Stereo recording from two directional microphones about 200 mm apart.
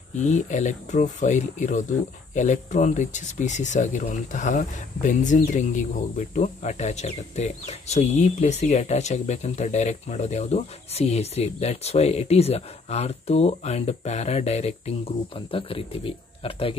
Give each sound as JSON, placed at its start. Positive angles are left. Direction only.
{"t": 0.1, "sound": "speech", "side_deg": 35}